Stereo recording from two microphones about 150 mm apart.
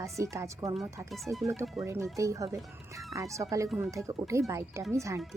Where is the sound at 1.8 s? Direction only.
15° right (ahead or behind).